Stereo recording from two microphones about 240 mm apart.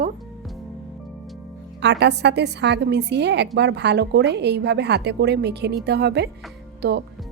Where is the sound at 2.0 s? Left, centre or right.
Right.